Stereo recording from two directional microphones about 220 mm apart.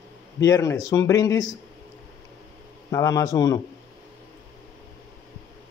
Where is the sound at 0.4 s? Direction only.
15° left (ahead or behind).